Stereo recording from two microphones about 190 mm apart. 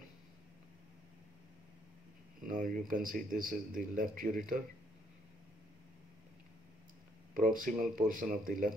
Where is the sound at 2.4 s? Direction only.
45° right (ahead or behind).